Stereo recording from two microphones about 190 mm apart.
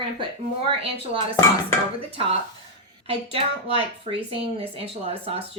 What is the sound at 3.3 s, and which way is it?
Speech, 30° right (ahead or behind).